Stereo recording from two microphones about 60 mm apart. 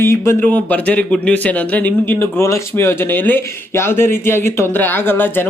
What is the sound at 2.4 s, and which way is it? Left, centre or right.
Speech, left.